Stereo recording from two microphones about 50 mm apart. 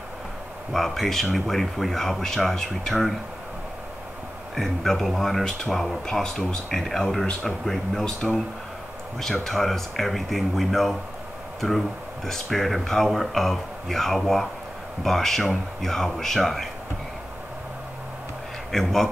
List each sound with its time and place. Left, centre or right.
0.7 s speech: centre
4.6 s speech: centre
8.0 s speech: centre
9.2 s speech: centre
12.3 s speech: centre
18.7 s speech: centre